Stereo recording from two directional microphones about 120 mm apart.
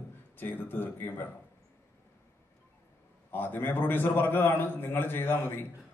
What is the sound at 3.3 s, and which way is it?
A man's voice, 15° left (ahead or behind).